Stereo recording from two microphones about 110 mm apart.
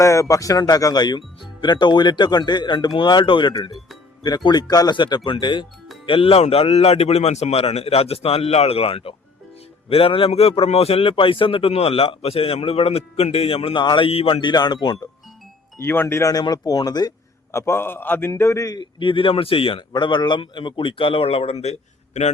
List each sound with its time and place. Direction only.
0.0 s a man's voice: 30° left (ahead or behind); by 5.6 s 45° left (ahead or behind)
6.1 s a man's voice: 55° left (ahead or behind)
14.5 s speech: 40° left (ahead or behind)
15.8 s a man's voice: 20° left (ahead or behind)
16.3 s speech: 35° left (ahead or behind)
17.5 s a man's voice: 25° left (ahead or behind); by 22.3 s 85° left